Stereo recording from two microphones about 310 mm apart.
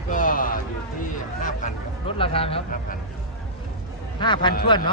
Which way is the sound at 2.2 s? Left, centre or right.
Centre.